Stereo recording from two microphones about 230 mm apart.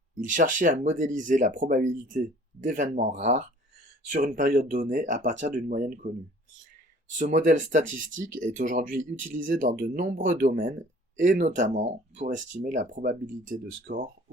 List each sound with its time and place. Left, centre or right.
0.2 s speech: right
7.2 s speech: right